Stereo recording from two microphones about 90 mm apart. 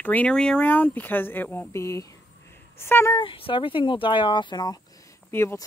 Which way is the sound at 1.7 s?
35° left (ahead or behind).